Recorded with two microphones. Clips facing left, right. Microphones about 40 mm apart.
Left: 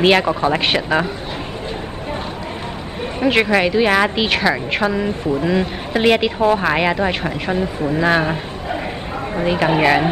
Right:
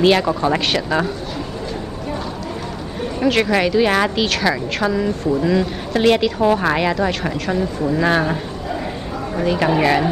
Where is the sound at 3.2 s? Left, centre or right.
Left.